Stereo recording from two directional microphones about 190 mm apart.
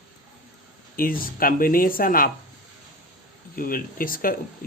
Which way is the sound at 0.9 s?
50° left (ahead or behind).